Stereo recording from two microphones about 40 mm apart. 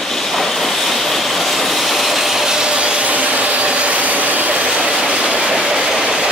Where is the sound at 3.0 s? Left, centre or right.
Right.